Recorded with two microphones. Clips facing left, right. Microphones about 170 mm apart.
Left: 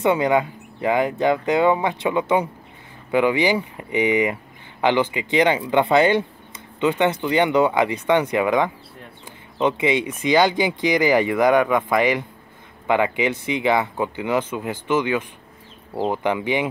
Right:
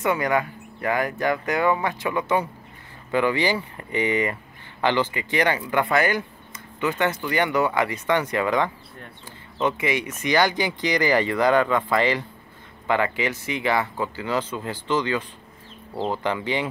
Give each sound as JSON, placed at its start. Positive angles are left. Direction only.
{"t": 0.0, "sound": "speech", "side_deg": 20}